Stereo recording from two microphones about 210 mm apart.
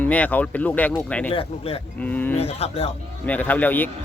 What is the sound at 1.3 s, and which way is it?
Speech, 30° left (ahead or behind).